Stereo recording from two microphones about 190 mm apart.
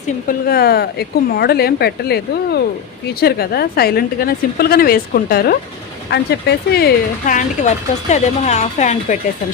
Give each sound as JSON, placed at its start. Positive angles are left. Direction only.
{"t": 0.3, "sound": "speech", "side_deg": 55}
{"t": 6.1, "sound": "speech", "side_deg": 65}